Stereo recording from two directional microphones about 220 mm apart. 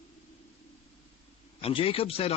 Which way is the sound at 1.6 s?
25° left (ahead or behind).